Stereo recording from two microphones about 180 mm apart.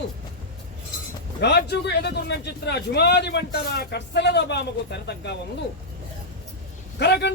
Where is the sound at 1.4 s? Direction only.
70° left (ahead or behind).